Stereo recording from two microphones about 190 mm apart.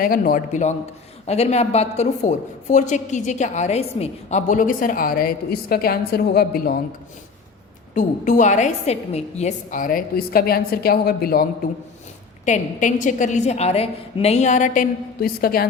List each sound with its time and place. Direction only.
0.0 s a woman's voice: 50° left (ahead or behind)
7.9 s a woman's voice: 40° left (ahead or behind)
12.5 s a woman's voice: 40° left (ahead or behind)